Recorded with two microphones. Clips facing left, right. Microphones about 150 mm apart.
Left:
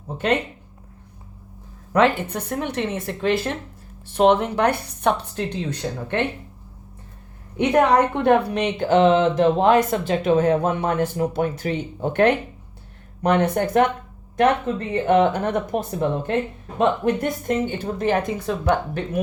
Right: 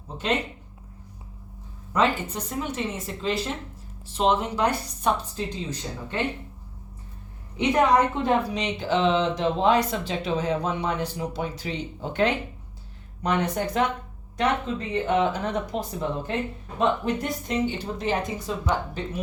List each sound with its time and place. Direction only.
2.3 s speech: 60° left (ahead or behind)
7.5 s a woman's voice: 55° left (ahead or behind)